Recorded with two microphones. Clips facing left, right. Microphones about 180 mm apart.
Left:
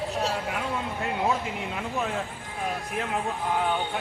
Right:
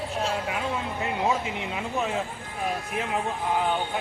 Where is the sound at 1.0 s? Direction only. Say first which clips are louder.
Right 1 dB; 5° right (ahead or behind).